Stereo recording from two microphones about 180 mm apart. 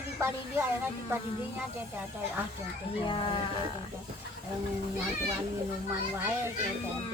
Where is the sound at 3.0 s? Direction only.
30° left (ahead or behind).